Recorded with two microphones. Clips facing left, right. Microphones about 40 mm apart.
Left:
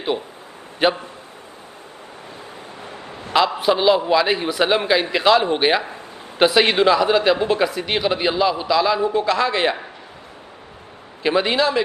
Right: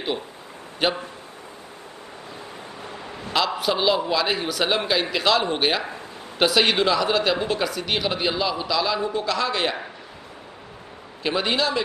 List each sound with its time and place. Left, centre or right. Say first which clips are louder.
0.8 s speech: left 5 dB; left
3.3 s speech: left 6 dB; centre
3.7 s speech: left 6 dB; centre
11.2 s speech: left 5 dB; centre